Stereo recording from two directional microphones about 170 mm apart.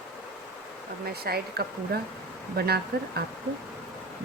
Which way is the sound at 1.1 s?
65° right (ahead or behind).